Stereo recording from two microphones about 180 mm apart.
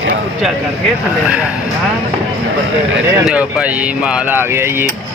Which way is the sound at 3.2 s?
5° right (ahead or behind).